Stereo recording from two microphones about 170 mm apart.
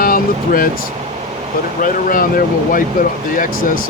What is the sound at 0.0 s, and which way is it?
Vehicle, 55° left (ahead or behind).